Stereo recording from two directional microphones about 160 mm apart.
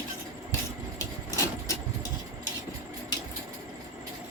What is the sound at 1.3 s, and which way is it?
Vehicle, 20° left (ahead or behind).